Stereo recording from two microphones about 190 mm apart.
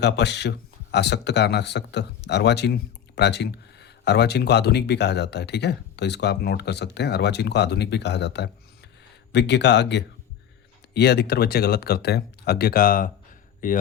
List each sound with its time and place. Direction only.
0.0 s speech: 65° left (ahead or behind)